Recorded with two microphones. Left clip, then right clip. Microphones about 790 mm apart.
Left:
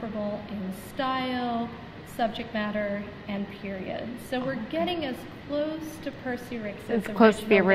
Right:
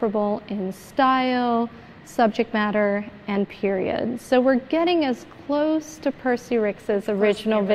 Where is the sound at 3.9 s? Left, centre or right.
Right.